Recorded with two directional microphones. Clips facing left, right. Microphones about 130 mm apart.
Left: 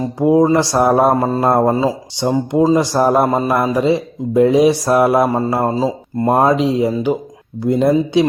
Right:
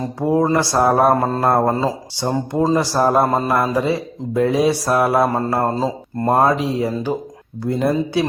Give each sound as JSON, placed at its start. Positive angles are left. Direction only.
{"t": 0.2, "sound": "mantra", "side_deg": 15}
{"t": 3.2, "sound": "speech", "side_deg": 15}
{"t": 5.7, "sound": "mantra", "side_deg": 10}
{"t": 7.6, "sound": "speech", "side_deg": 20}